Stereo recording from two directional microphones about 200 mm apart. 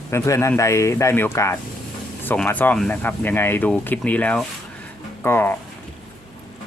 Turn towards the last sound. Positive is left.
turn(degrees=10)  # may be behind; listen again after turning